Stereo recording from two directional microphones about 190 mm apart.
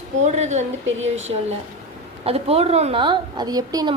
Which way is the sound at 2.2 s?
30° right (ahead or behind).